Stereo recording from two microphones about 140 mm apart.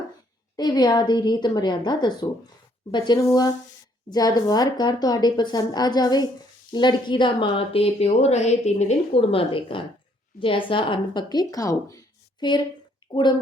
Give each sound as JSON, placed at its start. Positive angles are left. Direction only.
{"t": 0.5, "sound": "a woman's voice", "side_deg": 30}